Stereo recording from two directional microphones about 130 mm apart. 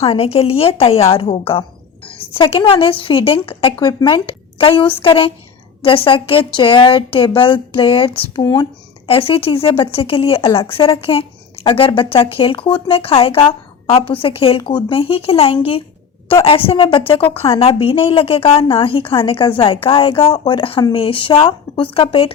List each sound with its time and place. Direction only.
0.0 s speech: 45° left (ahead or behind)
8.4 s speech: 30° left (ahead or behind)
9.0 s speech: 45° left (ahead or behind)
14.6 s speech: 35° left (ahead or behind)